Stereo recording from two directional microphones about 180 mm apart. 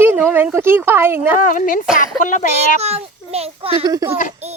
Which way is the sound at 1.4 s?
45° left (ahead or behind).